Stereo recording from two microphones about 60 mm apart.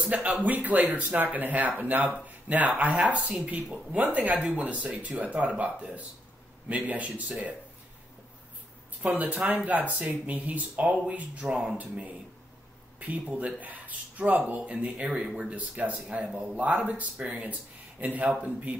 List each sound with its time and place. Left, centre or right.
0.1 s speech: right
9.0 s speech: right
13.2 s speech: centre